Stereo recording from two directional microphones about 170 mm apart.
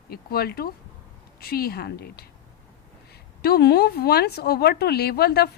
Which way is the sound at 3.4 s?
70° left (ahead or behind).